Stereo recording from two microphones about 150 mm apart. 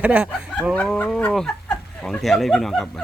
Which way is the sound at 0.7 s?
5° left (ahead or behind).